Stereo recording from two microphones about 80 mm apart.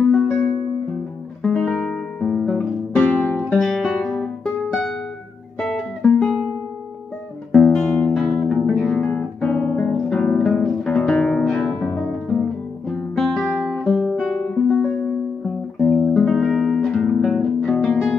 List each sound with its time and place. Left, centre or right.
0.1 s music: centre
3.5 s music: centre
5.7 s guitar: centre
7.5 s guitar: centre
8.1 s music: centre; by 9.9 s left
10.0 s music: centre
13.7 s guitar: centre
14.3 s music: centre
15.4 s music: centre
16.3 s music: centre
16.8 s music: centre